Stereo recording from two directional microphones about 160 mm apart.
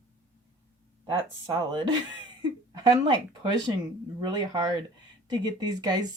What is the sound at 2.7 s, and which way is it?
Speech, 25° right (ahead or behind).